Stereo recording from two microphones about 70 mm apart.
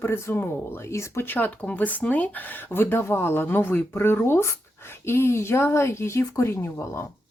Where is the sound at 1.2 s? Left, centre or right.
Left.